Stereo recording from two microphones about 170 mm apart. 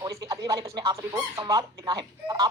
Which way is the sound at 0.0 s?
25° right (ahead or behind).